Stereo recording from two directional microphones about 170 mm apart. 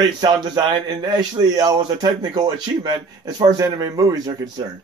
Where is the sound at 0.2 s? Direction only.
25° right (ahead or behind).